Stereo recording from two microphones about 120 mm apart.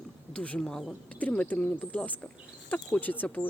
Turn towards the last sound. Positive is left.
turn(degrees=15)  # may be behind; listen again after turning